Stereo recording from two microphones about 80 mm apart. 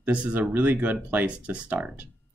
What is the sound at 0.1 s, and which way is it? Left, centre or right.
Speech, centre.